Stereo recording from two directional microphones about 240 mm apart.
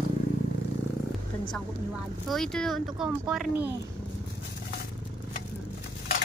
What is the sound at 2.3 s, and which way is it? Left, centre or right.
Speech, centre.